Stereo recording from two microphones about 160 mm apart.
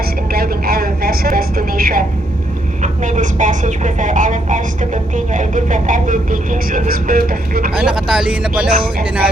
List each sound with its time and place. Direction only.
0.3 s a sound: 70° right (ahead or behind)
2.8 s speech: 50° right (ahead or behind); by 7.7 s 65° right (ahead or behind)
7.8 s speech: 5° right (ahead or behind)
8.7 s speech: 65° right (ahead or behind)